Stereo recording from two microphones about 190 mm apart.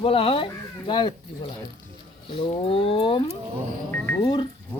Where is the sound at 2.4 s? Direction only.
30° left (ahead or behind).